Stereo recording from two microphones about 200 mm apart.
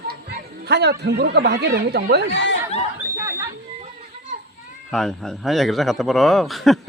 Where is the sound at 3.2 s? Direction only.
10° right (ahead or behind).